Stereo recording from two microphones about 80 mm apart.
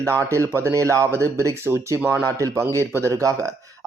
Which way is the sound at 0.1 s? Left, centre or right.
Right.